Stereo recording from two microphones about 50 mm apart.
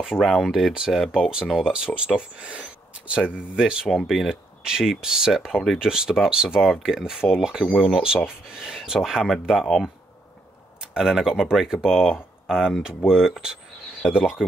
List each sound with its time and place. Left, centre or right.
0.2 s speech: centre
3.9 s speech: centre
10.8 s speech: centre